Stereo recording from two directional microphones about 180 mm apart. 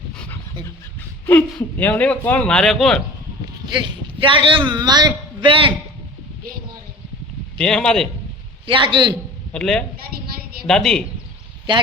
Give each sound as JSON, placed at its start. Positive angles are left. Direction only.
{"t": 1.3, "sound": "speech", "side_deg": 10}
{"t": 3.8, "sound": "a man's voice", "side_deg": -25}
{"t": 7.6, "sound": "speech", "side_deg": 5}
{"t": 8.6, "sound": "a man's voice", "side_deg": -30}
{"t": 9.5, "sound": "speech", "side_deg": 5}